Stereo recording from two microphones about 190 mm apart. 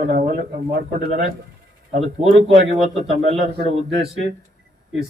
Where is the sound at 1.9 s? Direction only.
35° right (ahead or behind).